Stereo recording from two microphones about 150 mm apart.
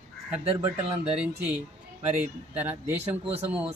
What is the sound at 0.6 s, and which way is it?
Speech, 15° right (ahead or behind).